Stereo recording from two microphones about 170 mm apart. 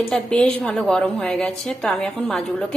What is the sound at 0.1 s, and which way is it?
A woman's voice, 5° left (ahead or behind).